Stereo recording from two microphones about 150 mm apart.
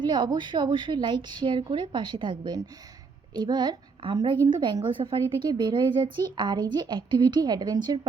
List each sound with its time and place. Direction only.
0.0 s a woman's voice: 30° right (ahead or behind)